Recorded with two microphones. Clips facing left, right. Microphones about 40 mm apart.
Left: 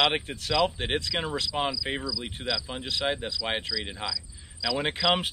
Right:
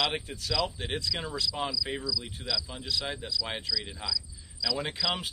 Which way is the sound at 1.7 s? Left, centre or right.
Left.